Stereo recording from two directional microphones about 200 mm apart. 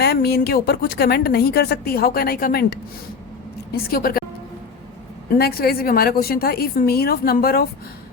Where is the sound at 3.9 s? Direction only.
45° left (ahead or behind).